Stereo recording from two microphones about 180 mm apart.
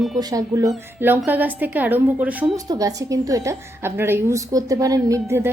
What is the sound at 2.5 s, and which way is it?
A woman's voice, 20° right (ahead or behind).